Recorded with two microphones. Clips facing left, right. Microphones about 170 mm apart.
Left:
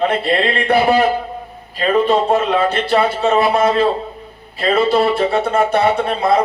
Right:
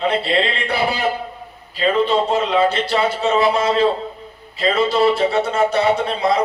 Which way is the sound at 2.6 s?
60° left (ahead or behind).